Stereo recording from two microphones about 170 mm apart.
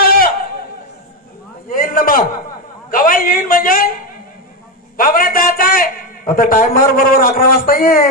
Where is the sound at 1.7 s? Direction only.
55° left (ahead or behind).